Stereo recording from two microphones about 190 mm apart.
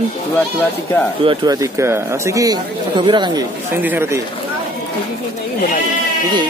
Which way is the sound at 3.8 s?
10° right (ahead or behind).